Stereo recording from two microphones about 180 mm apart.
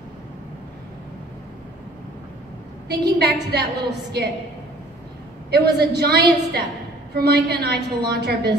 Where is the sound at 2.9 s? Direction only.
65° right (ahead or behind).